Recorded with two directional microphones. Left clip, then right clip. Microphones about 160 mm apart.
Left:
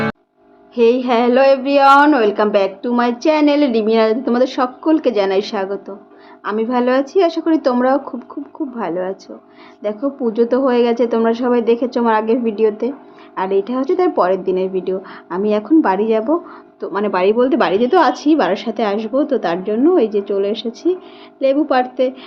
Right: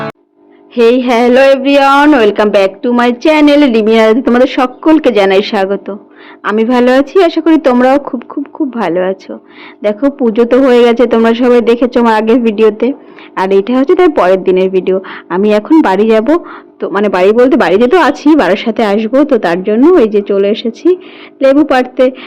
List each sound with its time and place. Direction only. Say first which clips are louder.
0.8 s a woman's voice: right 6 dB; 40° right (ahead or behind)